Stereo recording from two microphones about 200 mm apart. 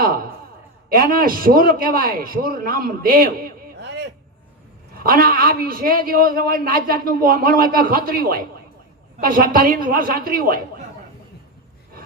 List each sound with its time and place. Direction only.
0.0 s a sound: 45° right (ahead or behind)
0.9 s a man's voice: 45° right (ahead or behind)
5.0 s a man's voice: 45° right (ahead or behind)